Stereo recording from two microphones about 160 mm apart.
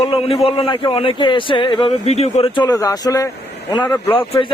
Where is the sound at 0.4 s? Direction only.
35° left (ahead or behind).